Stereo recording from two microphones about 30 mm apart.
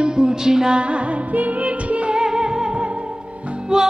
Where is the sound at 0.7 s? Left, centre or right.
Right.